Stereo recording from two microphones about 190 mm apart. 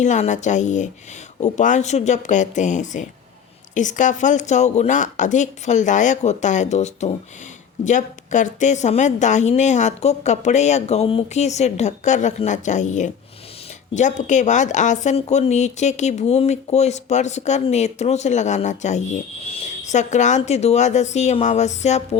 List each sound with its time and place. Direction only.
0.0 s a woman's voice: 40° left (ahead or behind)